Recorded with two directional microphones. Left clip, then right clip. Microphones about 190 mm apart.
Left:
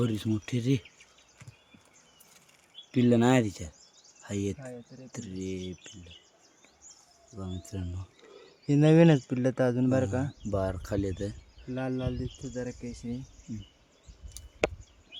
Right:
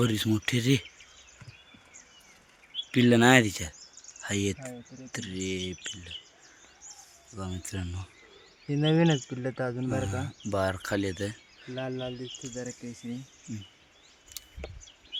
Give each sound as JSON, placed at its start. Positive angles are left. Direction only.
{"t": 0.0, "sound": "speech", "side_deg": 0}
{"t": 2.9, "sound": "speech", "side_deg": 5}
{"t": 7.3, "sound": "speech", "side_deg": 5}
{"t": 8.7, "sound": "speech", "side_deg": 45}
{"t": 10.5, "sound": "speech", "side_deg": 10}
{"t": 11.7, "sound": "speech", "side_deg": 50}